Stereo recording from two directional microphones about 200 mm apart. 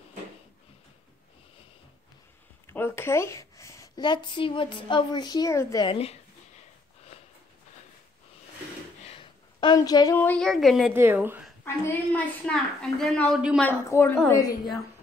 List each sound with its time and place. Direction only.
2.6 s a woman's voice: 10° left (ahead or behind)
5.9 s speech: 30° left (ahead or behind)
7.1 s sniff: 30° left (ahead or behind)
9.0 s a woman's voice: 25° left (ahead or behind); by 10.9 s centre (ahead or behind)
10.9 s a woman's voice: 10° right (ahead or behind)
11.6 s a woman's voice: 5° left (ahead or behind)
13.6 s a woman's voice: 10° left (ahead or behind)